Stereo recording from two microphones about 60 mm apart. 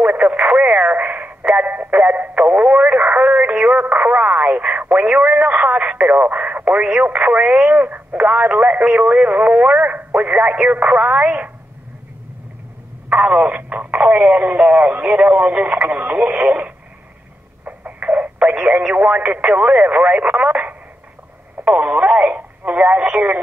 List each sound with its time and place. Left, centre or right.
0.0 s radio: right
13.1 s speech: right